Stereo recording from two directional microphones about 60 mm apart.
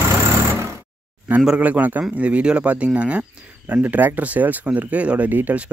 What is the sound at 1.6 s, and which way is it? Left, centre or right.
Speech, right.